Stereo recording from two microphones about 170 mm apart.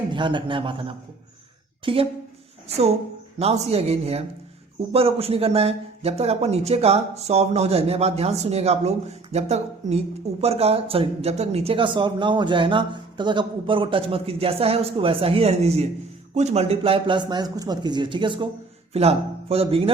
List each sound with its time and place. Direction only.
0.1 s a woman's voice: 30° right (ahead or behind)